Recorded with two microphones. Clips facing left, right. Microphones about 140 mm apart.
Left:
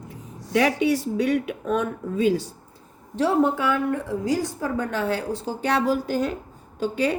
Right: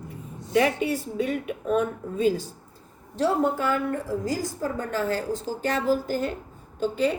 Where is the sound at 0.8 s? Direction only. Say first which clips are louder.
Left 5 dB; 80° left.